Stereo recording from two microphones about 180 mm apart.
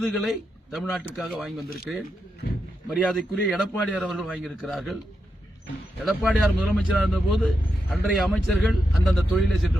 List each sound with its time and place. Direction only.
0.0 s speech: centre (ahead or behind)
6.1 s speech: centre (ahead or behind)